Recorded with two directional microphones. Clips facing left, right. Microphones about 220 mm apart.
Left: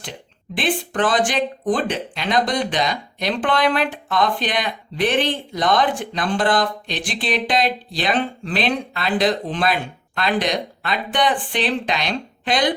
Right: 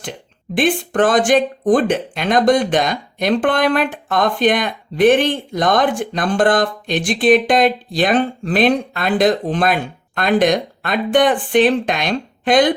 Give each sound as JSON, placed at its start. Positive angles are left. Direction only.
{"t": 0.5, "sound": "speech", "side_deg": -50}